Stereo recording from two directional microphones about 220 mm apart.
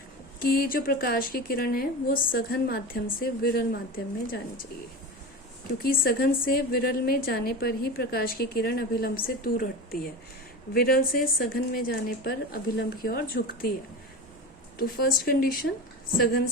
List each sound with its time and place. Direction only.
0.3 s a woman's voice: 40° left (ahead or behind)
5.8 s a woman's voice: 40° left (ahead or behind)
14.8 s a woman's voice: 45° left (ahead or behind)